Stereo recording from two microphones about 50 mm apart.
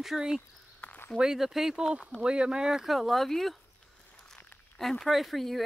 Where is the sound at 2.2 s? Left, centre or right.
Centre.